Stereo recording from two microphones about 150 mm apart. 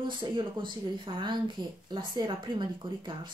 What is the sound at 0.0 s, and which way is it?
Speech, 30° right (ahead or behind).